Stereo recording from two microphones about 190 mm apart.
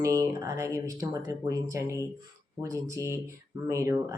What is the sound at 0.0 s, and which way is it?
Speech, 15° right (ahead or behind).